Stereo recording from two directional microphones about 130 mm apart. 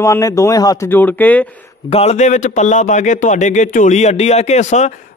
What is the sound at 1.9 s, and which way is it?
A man's voice, 60° left (ahead or behind).